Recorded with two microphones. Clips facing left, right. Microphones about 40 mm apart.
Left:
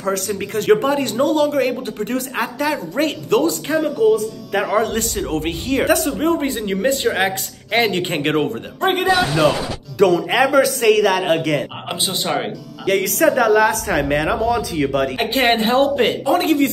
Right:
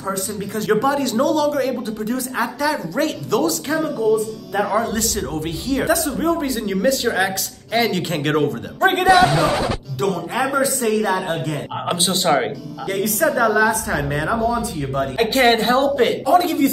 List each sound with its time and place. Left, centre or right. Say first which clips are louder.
0.0 s a man's voice: left 3 dB; left
4.1 s speech: left 1 dB; left
4.6 s a woman's voice: left 3 dB; left
8.9 s a man's voice: right 4 dB; centre
10.3 s a man's voice: left 5 dB; left
12.2 s speech: right 5 dB; centre
12.8 s speech: left 4 dB; left
14.3 s speech: left 1 dB; left
15.3 s a man's voice: right 2 dB; centre
15.6 s a woman's voice: left 1 dB; left